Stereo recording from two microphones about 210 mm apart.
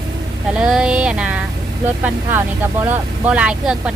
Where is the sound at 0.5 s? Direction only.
5° right (ahead or behind).